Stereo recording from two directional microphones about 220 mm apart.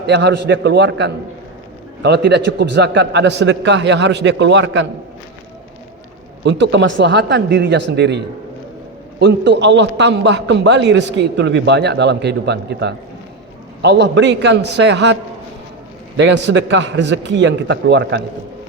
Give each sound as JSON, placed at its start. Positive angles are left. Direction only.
{"t": 0.0, "sound": "a man's voice", "side_deg": -50}
{"t": 6.4, "sound": "a man's voice", "side_deg": -55}